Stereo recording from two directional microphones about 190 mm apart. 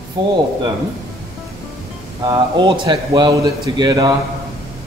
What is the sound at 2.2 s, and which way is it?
A man's voice, 25° right (ahead or behind).